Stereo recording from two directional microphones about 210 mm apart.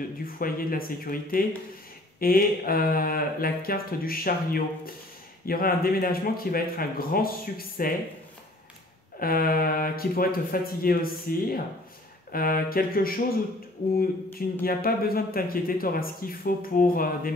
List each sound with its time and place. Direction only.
0.4 s speech: 45° left (ahead or behind)
9.2 s speech: 45° left (ahead or behind)
14.6 s speech: 45° left (ahead or behind)